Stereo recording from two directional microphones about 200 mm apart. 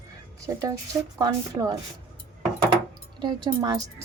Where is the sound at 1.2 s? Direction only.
20° right (ahead or behind).